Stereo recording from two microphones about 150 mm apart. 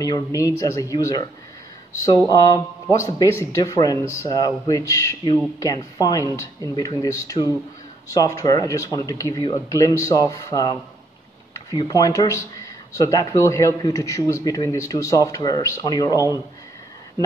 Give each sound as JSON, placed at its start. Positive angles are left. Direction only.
{"t": 0.0, "sound": "a man's voice", "side_deg": 25}